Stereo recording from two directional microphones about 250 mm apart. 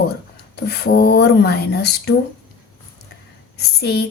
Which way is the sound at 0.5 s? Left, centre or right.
Left.